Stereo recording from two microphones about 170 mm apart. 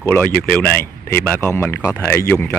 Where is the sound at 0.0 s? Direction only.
10° left (ahead or behind).